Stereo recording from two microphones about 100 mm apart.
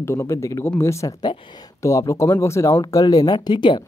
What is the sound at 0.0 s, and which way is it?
Speech, 30° left (ahead or behind).